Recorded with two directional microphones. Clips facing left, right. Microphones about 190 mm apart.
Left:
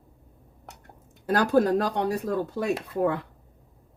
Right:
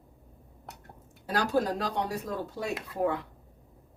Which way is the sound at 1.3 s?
55° left (ahead or behind).